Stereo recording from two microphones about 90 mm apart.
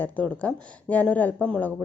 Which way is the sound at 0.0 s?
20° left (ahead or behind).